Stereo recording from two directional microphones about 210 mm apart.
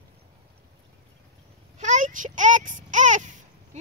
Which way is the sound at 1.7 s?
35° right (ahead or behind).